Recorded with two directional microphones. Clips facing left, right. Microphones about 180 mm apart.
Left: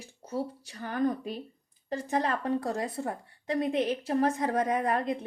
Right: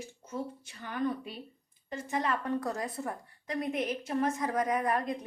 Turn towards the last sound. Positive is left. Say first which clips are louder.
# left 2 dB
turn(degrees=30)  # may be behind; listen again after turning